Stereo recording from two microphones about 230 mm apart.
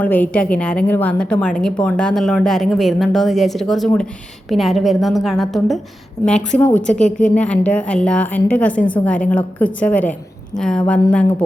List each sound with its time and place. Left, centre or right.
0.0 s a woman's voice: centre
6.9 s a woman's voice: left
7.3 s a woman's voice: centre